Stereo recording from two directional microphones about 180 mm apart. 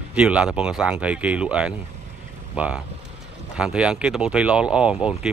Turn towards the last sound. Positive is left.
turn(degrees=-5)  # may be behind; listen again after turning